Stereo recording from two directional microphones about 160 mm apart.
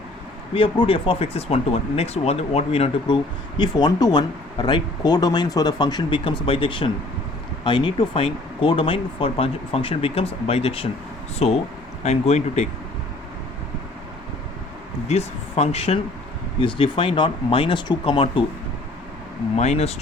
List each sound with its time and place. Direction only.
0.5 s speech: 35° left (ahead or behind)
3.6 s speech: 25° left (ahead or behind); by 12.6 s 45° left (ahead or behind)
15.0 s speech: 40° left (ahead or behind)
19.5 s speech: 45° left (ahead or behind)